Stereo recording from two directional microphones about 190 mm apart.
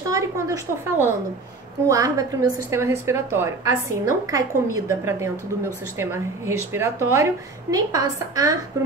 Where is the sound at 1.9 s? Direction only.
20° right (ahead or behind).